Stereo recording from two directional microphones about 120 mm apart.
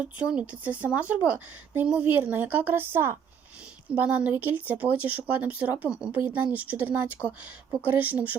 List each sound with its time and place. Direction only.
0.0 s speech: 10° right (ahead or behind)